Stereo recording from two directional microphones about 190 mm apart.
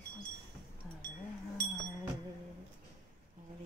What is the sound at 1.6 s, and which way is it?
Livestock, 60° right (ahead or behind).